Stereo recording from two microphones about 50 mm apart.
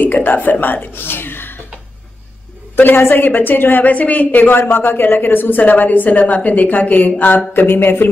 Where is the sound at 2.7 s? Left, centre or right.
Left.